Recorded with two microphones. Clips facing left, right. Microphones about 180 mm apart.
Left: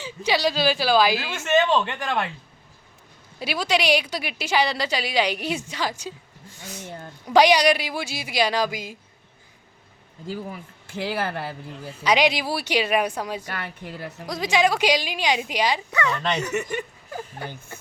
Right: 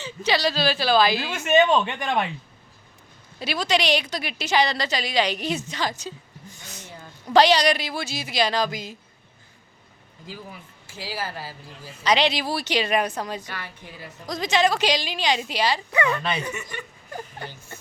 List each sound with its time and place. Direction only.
0.0 s speech: 10° left (ahead or behind)
1.4 s speech: 15° right (ahead or behind)
3.3 s speech: 10° left (ahead or behind)
7.3 s speech: 10° left (ahead or behind)
10.8 s speech: 60° left (ahead or behind)
12.0 s speech: 10° left (ahead or behind)
13.5 s speech: 60° left (ahead or behind)
14.3 s speech: 10° left (ahead or behind)
15.9 s speech: 15° right (ahead or behind)
17.1 s speech: 5° left (ahead or behind)